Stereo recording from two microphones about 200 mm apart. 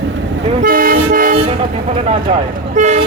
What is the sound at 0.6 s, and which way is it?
Toot, 45° right (ahead or behind).